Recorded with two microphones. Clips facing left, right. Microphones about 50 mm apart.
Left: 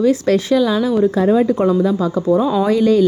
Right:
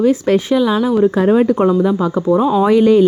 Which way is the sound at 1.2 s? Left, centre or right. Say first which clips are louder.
Right 2 dB; right.